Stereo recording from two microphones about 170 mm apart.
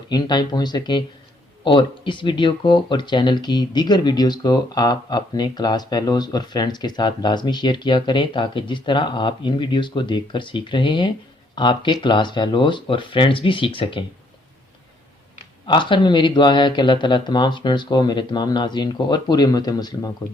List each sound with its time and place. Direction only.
0.1 s speech: 25° left (ahead or behind)
15.6 s speech: 30° left (ahead or behind)